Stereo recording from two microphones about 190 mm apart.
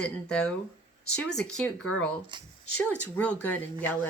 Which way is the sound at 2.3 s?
25° right (ahead or behind).